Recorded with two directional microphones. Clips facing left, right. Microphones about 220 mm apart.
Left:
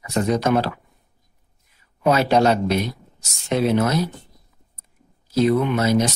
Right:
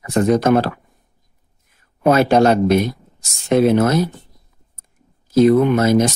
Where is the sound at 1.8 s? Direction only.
50° right (ahead or behind).